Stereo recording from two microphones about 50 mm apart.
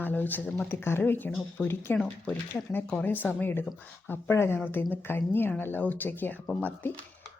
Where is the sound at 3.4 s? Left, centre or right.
Left.